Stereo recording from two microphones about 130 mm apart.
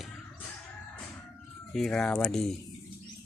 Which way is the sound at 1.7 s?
5° left (ahead or behind).